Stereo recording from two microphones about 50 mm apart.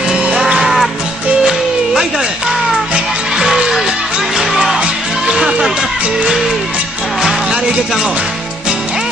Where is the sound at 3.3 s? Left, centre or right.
Centre.